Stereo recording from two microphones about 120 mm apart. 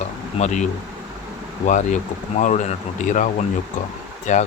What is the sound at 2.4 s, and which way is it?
Speech, 80° left.